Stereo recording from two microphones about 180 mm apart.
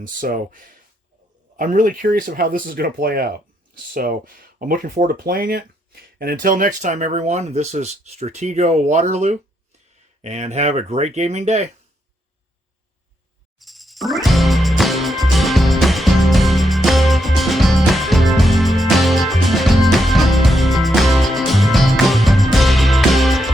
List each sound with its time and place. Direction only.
0.0 s speech: 50° right (ahead or behind)
13.6 s music: centre (ahead or behind)